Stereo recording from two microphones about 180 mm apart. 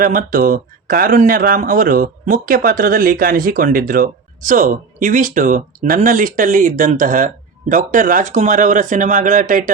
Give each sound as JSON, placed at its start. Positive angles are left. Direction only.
{"t": 0.0, "sound": "speech", "side_deg": -50}